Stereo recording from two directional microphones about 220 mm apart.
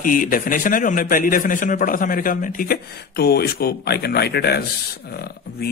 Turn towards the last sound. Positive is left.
turn(degrees=45)  # may be behind; listen again after turning